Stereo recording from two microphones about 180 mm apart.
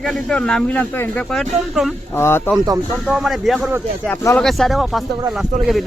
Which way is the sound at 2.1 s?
15° left (ahead or behind).